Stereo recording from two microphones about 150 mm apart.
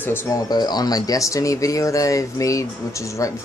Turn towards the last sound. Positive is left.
turn(degrees=20)  # may be behind; listen again after turning